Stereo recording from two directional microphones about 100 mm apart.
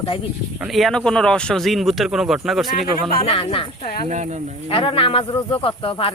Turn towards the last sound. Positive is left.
turn(degrees=65)  # may be behind; listen again after turning